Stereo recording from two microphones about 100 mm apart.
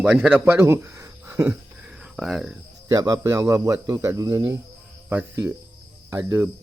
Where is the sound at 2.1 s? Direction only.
5° right (ahead or behind).